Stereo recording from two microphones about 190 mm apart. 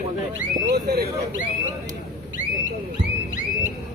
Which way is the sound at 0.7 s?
55° right (ahead or behind).